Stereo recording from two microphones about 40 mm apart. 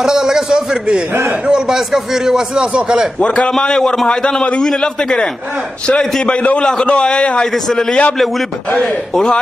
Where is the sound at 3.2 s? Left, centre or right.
Left.